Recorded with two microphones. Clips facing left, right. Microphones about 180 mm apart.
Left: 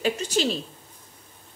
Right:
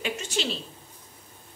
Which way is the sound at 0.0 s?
40° left (ahead or behind).